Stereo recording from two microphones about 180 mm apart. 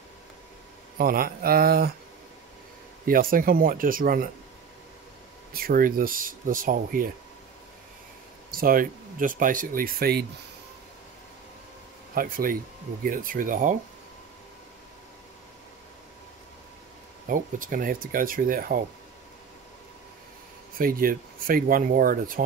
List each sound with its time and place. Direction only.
0.9 s speech: 55° right (ahead or behind)
3.1 s speech: 50° right (ahead or behind)
5.5 s speech: 55° right (ahead or behind)
8.5 s speech: 55° right (ahead or behind)
12.2 s speech: 50° right (ahead or behind)
17.3 s speech: 50° right (ahead or behind)
20.7 s speech: 55° right (ahead or behind)